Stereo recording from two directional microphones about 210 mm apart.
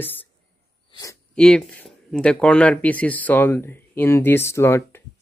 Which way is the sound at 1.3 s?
5° left (ahead or behind).